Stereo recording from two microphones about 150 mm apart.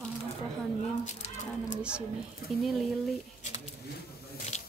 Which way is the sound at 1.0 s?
50° left (ahead or behind).